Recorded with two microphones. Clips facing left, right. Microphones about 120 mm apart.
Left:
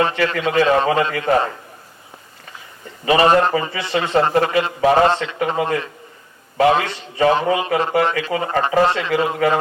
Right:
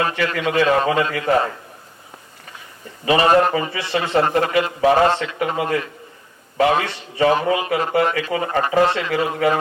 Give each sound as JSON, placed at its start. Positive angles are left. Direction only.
{"t": 0.0, "sound": "a man's voice", "side_deg": 30}
{"t": 3.2, "sound": "a man's voice", "side_deg": 30}